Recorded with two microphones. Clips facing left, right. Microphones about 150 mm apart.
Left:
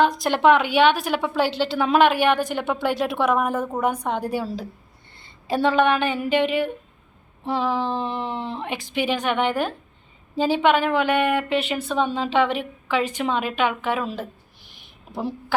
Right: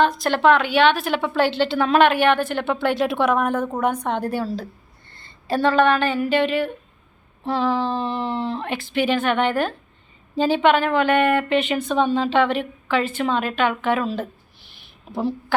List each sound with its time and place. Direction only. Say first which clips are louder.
0.0 s a woman's voice: even; 15° left (ahead or behind)